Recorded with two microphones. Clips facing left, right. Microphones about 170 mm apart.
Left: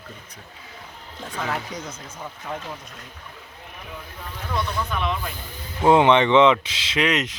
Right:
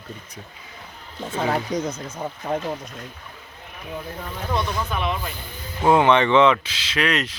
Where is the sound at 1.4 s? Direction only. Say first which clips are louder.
Right 6 dB; 35° right (ahead or behind).